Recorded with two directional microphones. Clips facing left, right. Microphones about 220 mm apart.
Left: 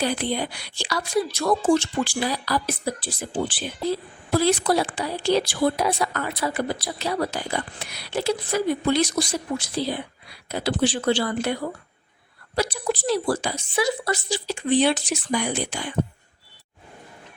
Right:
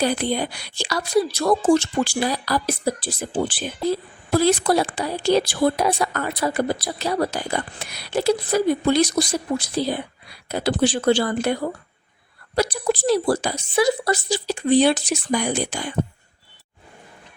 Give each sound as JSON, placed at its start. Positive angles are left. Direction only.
{"t": 0.0, "sound": "a woman's voice", "side_deg": -45}
{"t": 12.5, "sound": "a woman's voice", "side_deg": -40}